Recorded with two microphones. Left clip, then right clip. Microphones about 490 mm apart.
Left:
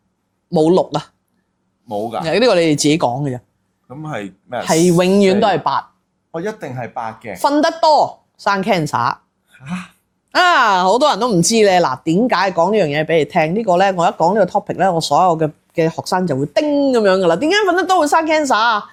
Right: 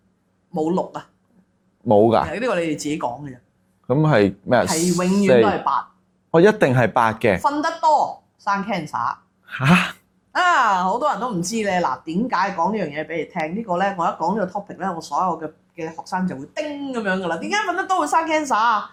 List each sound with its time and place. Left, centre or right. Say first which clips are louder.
0.6 s speech: left 9 dB; left
1.9 s speech: right 7 dB; right
2.3 s speech: left 9 dB; left
3.8 s speech: right 10 dB; right
4.7 s speech: left 8 dB; left
6.3 s speech: right 10 dB; right
7.4 s speech: left 6 dB; left
9.5 s speech: right 13 dB; right
10.3 s speech: left 5 dB; left